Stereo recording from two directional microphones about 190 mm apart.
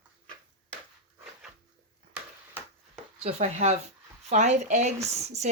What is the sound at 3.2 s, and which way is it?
Speech, 35° right (ahead or behind).